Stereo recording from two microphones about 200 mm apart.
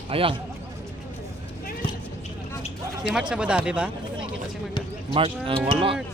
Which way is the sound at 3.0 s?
5° right (ahead or behind).